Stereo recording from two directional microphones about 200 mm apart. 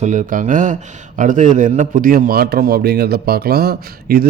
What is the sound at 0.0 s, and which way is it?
A man's voice, 40° right (ahead or behind).